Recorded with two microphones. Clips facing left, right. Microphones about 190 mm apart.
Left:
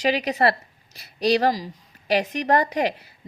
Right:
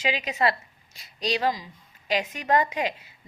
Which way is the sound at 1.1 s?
65° left (ahead or behind).